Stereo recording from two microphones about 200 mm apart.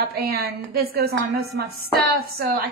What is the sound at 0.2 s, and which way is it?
A woman's voice, 50° right (ahead or behind).